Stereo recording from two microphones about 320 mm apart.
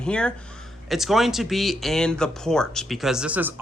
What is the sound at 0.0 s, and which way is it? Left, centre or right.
Speech, centre.